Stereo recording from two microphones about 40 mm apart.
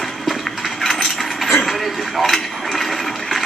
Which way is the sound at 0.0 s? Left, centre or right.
Centre.